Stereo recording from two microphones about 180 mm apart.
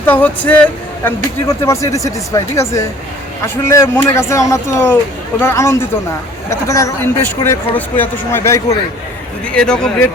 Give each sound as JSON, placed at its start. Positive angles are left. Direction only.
{"t": 0.0, "sound": "speech", "side_deg": 10}
{"t": 9.6, "sound": "speech", "side_deg": 5}